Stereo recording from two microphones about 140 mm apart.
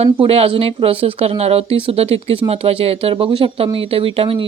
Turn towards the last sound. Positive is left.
turn(degrees=-40)  # may be behind; listen again after turning